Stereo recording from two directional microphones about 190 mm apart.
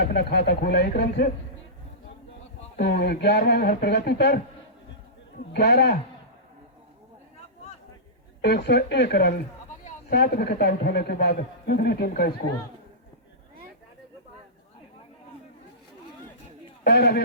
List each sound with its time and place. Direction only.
0.0 s a man's voice: 55° left (ahead or behind)
2.7 s a man's voice: 55° left (ahead or behind)
5.5 s a man's voice: 55° left (ahead or behind)
8.4 s a man's voice: 60° left (ahead or behind)
16.8 s a man's voice: 55° left (ahead or behind)